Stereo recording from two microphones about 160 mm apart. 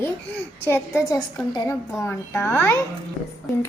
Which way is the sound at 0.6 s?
15° left (ahead or behind).